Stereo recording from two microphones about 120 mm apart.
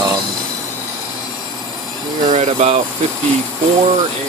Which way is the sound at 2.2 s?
65° right (ahead or behind).